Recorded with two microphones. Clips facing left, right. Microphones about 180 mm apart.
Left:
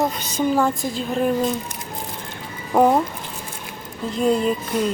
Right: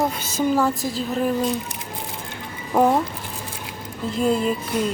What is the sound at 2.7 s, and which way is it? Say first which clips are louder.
Speech: left 2 dB; 5° right (ahead or behind).